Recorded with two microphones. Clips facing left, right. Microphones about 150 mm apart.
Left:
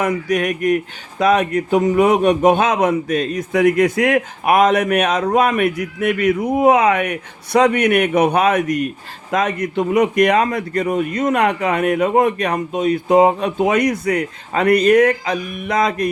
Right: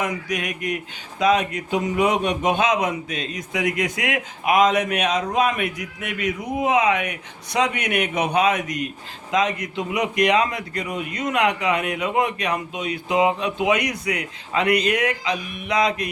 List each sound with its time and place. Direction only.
0.0 s a man's voice: 55° left (ahead or behind)